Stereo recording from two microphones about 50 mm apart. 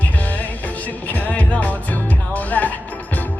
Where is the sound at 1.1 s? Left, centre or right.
Left.